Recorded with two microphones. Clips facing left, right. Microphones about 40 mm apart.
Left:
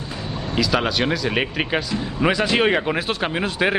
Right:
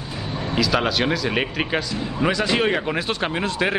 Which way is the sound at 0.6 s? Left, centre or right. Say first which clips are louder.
Even; centre.